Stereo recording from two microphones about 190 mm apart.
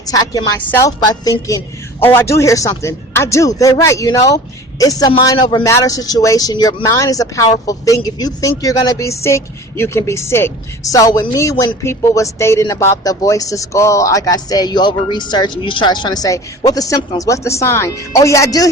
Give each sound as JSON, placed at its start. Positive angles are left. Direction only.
{"t": 0.1, "sound": "a woman's voice", "side_deg": 20}